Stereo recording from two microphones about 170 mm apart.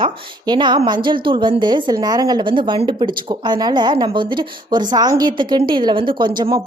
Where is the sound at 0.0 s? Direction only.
25° right (ahead or behind).